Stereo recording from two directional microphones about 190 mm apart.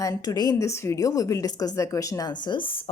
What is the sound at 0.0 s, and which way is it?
Speech, 20° left (ahead or behind).